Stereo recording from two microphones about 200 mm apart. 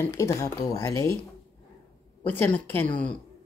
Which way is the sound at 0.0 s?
15° left (ahead or behind).